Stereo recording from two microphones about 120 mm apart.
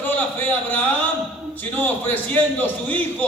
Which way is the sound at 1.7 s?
15° left (ahead or behind).